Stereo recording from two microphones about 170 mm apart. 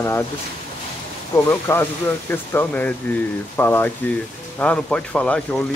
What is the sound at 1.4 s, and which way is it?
Speech, 15° left (ahead or behind).